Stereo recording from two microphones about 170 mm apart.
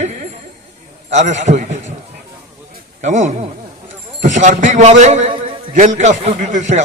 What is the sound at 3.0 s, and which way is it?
A man's voice, 45° right (ahead or behind).